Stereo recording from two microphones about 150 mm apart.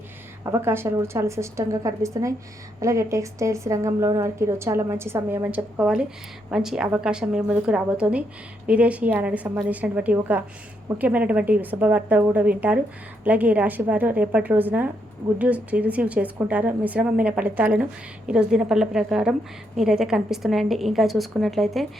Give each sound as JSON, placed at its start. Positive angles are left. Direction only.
{"t": 0.4, "sound": "a woman's voice", "side_deg": -20}